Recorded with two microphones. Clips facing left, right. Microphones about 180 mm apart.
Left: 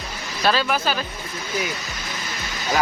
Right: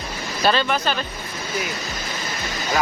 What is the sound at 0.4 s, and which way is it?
Speech, 5° left (ahead or behind).